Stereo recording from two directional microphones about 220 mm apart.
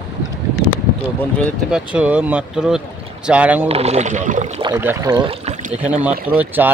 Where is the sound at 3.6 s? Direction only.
30° right (ahead or behind).